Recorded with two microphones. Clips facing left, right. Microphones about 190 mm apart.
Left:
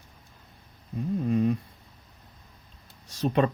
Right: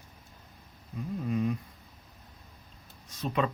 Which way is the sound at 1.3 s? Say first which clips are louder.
Left 5 dB; 35° left (ahead or behind).